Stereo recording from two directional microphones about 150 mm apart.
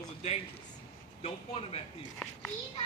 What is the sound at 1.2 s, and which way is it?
Speech, 40° left (ahead or behind).